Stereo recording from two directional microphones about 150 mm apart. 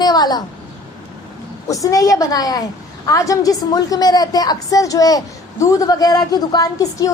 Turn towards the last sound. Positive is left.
turn(degrees=20)  # may be behind; listen again after turning